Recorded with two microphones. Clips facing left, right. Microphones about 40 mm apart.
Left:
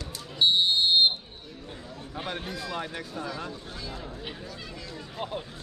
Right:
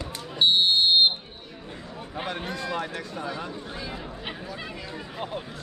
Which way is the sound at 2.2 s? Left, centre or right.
Centre.